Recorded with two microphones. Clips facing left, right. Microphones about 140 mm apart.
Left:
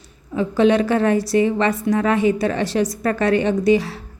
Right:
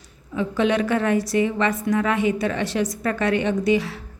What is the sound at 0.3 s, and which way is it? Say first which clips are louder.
A woman's voice: left 5 dB; 35° left (ahead or behind).